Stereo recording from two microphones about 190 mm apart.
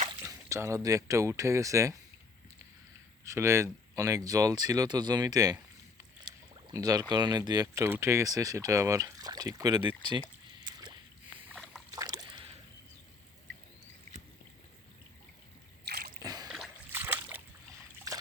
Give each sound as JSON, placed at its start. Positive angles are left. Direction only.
{"t": 0.2, "sound": "speech", "side_deg": -15}
{"t": 3.2, "sound": "speech", "side_deg": -15}
{"t": 6.2, "sound": "rowboat", "side_deg": -25}
{"t": 7.1, "sound": "speech", "side_deg": -20}
{"t": 11.5, "sound": "boat", "side_deg": 5}
{"t": 12.0, "sound": "boat", "side_deg": -15}
{"t": 15.9, "sound": "splash", "side_deg": -55}
{"t": 16.2, "sound": "a sound", "side_deg": -20}
{"t": 16.5, "sound": "splash", "side_deg": -10}